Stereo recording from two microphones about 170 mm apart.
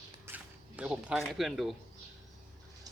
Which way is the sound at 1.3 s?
Centre (ahead or behind).